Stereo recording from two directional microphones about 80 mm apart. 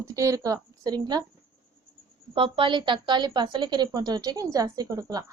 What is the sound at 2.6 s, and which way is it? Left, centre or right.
A woman's voice, right.